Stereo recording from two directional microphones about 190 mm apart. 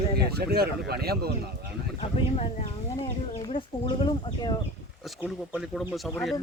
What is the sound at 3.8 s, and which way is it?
Speech, 25° left (ahead or behind).